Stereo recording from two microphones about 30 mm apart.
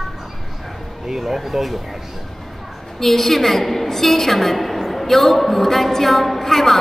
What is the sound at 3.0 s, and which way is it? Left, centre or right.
A woman's voice, centre.